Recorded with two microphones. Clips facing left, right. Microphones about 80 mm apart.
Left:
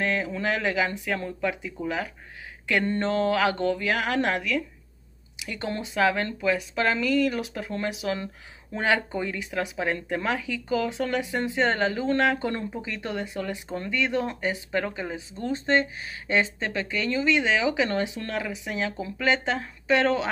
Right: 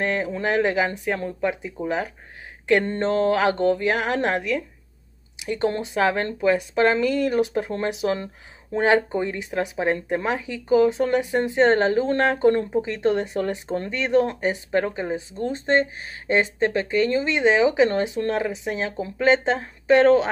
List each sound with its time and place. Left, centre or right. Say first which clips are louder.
0.0 s speech: right 3 dB; right